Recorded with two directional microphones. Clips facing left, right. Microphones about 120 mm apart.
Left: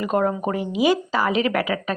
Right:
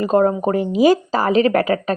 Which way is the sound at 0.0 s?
35° right (ahead or behind).